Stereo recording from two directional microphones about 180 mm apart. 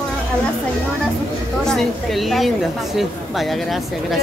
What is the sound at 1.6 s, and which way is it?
A woman's voice, centre (ahead or behind).